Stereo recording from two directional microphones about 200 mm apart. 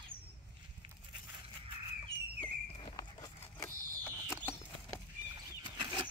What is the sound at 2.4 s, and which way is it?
Walk, 20° left (ahead or behind).